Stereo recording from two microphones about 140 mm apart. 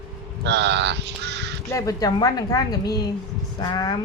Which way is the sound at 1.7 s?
25° left (ahead or behind).